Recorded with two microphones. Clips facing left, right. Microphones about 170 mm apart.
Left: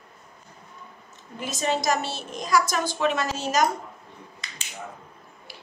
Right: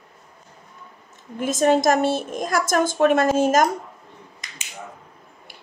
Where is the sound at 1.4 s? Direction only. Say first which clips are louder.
Right 9 dB; 50° right (ahead or behind).